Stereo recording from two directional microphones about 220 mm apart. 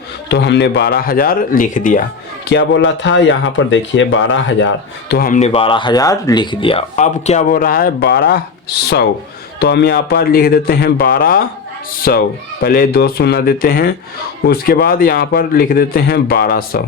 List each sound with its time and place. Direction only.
0.3 s a man's voice: 50° left (ahead or behind)
2.5 s speech: 55° left (ahead or behind)
9.6 s a man's voice: 45° left (ahead or behind)